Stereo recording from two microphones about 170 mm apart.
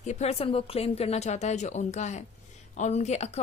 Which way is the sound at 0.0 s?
40° left (ahead or behind).